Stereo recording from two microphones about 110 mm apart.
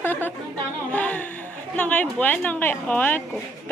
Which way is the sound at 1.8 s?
15° left (ahead or behind).